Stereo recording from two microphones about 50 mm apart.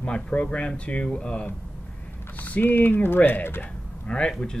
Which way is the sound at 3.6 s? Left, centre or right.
Centre.